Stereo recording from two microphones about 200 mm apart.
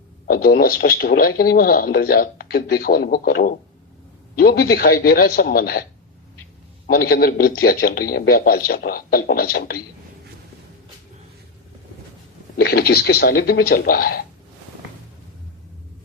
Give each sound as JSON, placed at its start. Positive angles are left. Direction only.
{"t": 0.3, "sound": "speech", "side_deg": 50}
{"t": 6.8, "sound": "speech", "side_deg": 50}
{"t": 12.5, "sound": "speech", "side_deg": 55}